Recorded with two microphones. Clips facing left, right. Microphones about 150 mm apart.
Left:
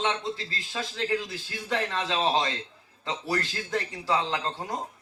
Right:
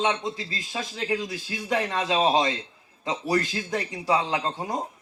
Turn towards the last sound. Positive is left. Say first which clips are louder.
# right 3 dB
turn(degrees=-15)  # may be behind; listen again after turning